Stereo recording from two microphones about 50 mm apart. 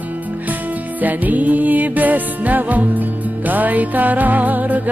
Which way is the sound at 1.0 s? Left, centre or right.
Right.